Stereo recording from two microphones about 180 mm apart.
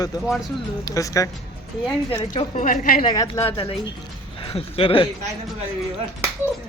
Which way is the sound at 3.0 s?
25° left (ahead or behind).